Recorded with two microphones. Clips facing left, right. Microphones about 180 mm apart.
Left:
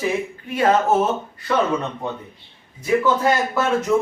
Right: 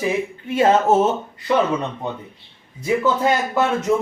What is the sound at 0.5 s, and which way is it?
Speech, 25° right (ahead or behind).